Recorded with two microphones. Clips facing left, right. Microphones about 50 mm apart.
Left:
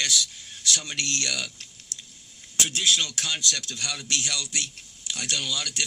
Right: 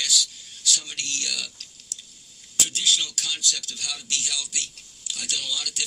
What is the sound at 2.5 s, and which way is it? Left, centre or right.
Speech, left.